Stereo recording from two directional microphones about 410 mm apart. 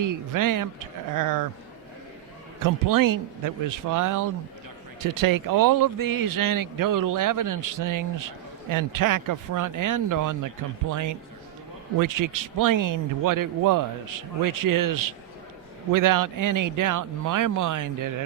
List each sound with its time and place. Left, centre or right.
0.0 s speech: right
2.6 s speech: right